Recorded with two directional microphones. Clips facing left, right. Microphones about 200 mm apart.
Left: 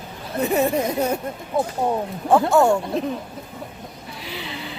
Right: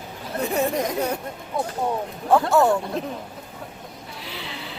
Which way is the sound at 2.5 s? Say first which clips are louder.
Left 2 dB; centre (ahead or behind).